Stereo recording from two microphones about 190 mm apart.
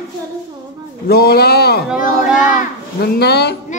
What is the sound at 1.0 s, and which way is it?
Speech, 55° left (ahead or behind).